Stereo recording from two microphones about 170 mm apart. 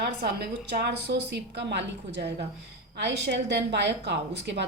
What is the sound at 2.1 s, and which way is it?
A woman's voice, 75° right (ahead or behind).